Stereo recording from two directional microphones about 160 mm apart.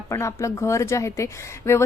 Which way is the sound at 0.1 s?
20° left (ahead or behind).